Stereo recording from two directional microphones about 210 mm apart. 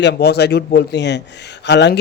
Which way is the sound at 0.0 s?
50° left (ahead or behind).